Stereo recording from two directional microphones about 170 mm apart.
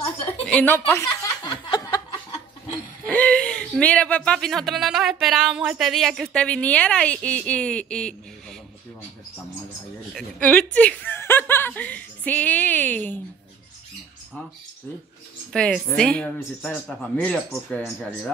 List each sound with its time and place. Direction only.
0.5 s a sound: 10° left (ahead or behind)
3.1 s speech: 5° left (ahead or behind)
10.1 s speech: centre (ahead or behind)
15.5 s speech: 5° left (ahead or behind)